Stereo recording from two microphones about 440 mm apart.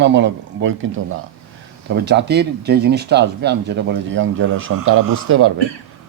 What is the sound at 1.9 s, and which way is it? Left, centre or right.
Speech, right.